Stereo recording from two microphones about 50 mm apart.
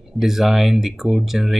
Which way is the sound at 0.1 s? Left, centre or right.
Centre.